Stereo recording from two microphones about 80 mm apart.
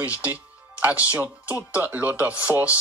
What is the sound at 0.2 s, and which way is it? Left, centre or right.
Music, centre.